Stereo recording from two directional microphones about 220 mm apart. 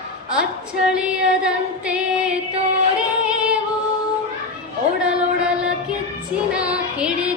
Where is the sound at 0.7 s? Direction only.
5° right (ahead or behind).